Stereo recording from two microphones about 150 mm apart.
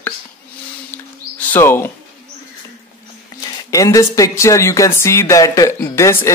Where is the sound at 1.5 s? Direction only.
15° left (ahead or behind).